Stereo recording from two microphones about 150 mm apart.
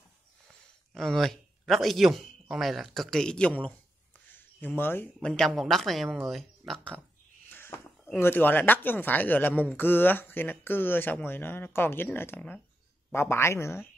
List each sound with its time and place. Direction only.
0.9 s a woman's voice: centre (ahead or behind)
7.4 s a sound: 15° left (ahead or behind)
8.2 s speech: 15° left (ahead or behind)